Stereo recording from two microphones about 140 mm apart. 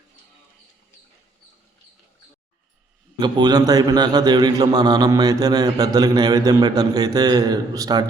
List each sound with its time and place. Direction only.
3.2 s a man's voice: 30° right (ahead or behind)